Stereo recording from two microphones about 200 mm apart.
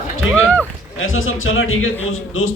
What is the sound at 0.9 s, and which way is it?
A man's voice, 85° left.